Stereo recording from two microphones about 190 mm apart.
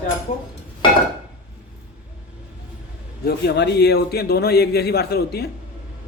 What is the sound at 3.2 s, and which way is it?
A man's voice, 60° left (ahead or behind).